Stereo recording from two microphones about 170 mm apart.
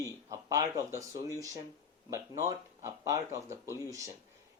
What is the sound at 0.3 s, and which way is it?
Speech, 20° right (ahead or behind).